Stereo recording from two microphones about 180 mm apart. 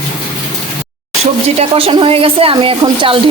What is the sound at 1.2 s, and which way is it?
Speech, 35° right (ahead or behind).